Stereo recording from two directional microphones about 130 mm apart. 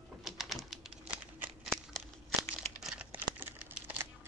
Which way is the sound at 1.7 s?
5° left (ahead or behind).